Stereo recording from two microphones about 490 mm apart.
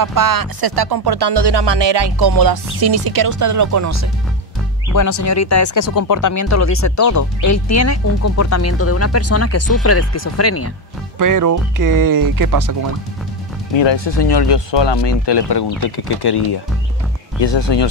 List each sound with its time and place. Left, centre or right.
0.0 s speech: right
4.9 s speech: left
11.1 s speech: right
13.7 s speech: left